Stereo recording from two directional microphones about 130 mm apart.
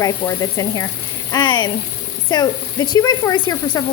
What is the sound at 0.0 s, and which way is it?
Speech, 30° left (ahead or behind).